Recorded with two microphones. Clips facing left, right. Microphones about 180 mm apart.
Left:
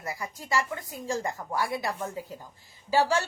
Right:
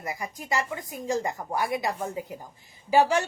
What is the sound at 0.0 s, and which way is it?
A woman's voice, 20° right (ahead or behind).